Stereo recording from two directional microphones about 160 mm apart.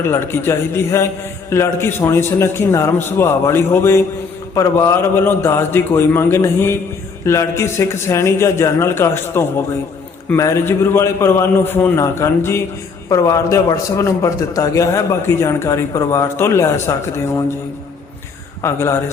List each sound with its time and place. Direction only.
0.0 s a man's voice: 15° left (ahead or behind)
18.6 s a man's voice: 15° left (ahead or behind)